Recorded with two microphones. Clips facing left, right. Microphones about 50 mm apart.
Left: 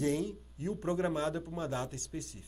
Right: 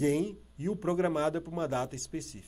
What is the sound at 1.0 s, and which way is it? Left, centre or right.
Speech, right.